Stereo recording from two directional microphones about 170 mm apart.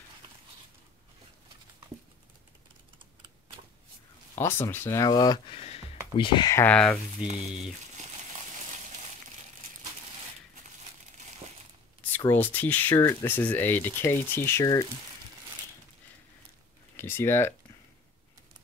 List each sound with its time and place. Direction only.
4.4 s speech: 15° left (ahead or behind)
5.6 s a sound: 35° left (ahead or behind)
6.1 s speech: 30° left (ahead or behind)
6.5 s speech: 10° left (ahead or behind)
7.2 s speech: 5° right (ahead or behind)
12.3 s speech: 10° left (ahead or behind)
16.9 s speech: 15° left (ahead or behind)